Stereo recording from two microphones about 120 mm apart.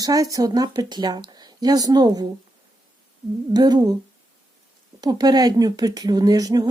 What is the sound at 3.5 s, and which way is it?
Speech, 35° right (ahead or behind).